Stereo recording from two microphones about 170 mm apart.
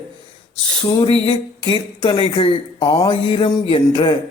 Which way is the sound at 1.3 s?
25° left (ahead or behind).